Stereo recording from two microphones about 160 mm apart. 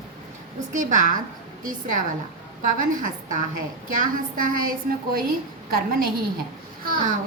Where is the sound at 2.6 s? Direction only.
55° right (ahead or behind).